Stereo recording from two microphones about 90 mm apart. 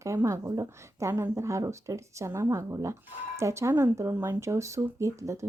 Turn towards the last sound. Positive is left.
turn(degrees=-35)  # may be behind; listen again after turning